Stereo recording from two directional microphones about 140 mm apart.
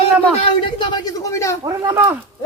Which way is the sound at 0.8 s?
30° left (ahead or behind).